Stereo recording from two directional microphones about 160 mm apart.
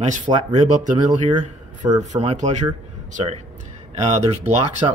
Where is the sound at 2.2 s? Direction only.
45° right (ahead or behind).